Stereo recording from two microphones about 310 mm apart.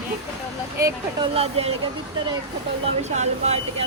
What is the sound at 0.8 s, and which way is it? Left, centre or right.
Speech, centre.